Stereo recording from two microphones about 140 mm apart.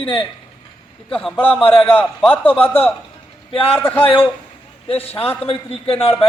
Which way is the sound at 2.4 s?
10° left (ahead or behind).